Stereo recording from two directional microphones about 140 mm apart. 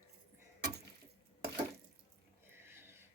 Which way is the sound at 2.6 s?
15° right (ahead or behind).